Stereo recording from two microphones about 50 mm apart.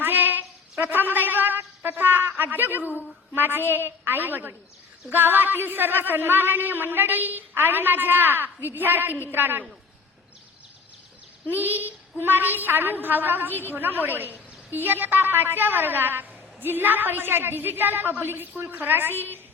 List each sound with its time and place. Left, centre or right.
0.0 s a sound: right
3.3 s a woman's voice: right
11.6 s a woman's voice: right